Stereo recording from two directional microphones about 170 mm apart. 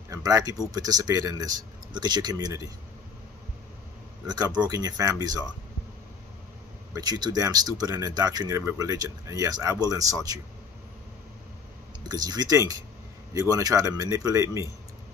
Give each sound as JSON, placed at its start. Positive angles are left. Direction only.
{"t": 0.1, "sound": "speech", "side_deg": -20}
{"t": 4.6, "sound": "speech", "side_deg": -20}
{"t": 6.9, "sound": "speech", "side_deg": -20}
{"t": 12.1, "sound": "speech", "side_deg": -20}